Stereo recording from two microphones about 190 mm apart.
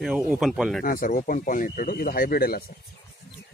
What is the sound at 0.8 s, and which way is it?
Speech, 45° left (ahead or behind).